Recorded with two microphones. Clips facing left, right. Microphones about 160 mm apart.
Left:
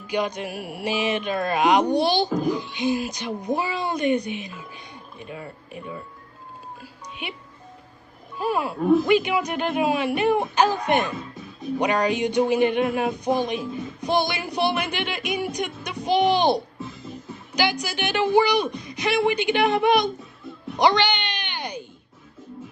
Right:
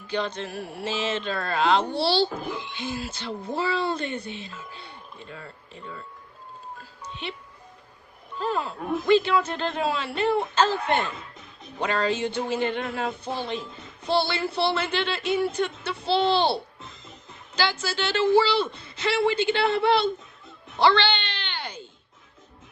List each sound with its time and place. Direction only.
0.1 s speech: 15° left (ahead or behind)
6.8 s music: 10° left (ahead or behind)
8.4 s speech: 10° left (ahead or behind)
20.7 s a sound: 15° left (ahead or behind)